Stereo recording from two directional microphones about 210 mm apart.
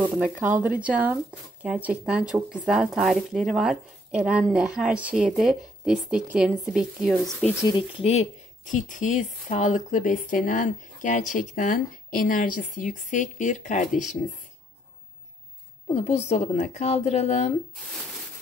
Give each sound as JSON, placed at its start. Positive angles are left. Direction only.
{"t": 0.0, "sound": "speech", "side_deg": -10}
{"t": 8.0, "sound": "speech", "side_deg": 30}
{"t": 15.9, "sound": "speech", "side_deg": 30}